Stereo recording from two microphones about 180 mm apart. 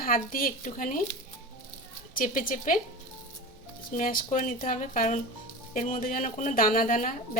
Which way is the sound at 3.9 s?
50° left (ahead or behind).